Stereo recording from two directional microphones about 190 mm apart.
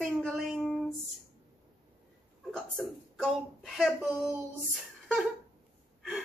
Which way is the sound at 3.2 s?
Centre (ahead or behind).